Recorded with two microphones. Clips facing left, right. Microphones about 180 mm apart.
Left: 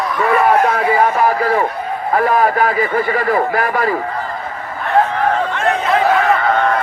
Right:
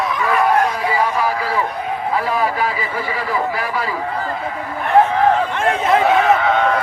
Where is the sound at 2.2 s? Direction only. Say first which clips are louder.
Left 7 dB; 50° left (ahead or behind).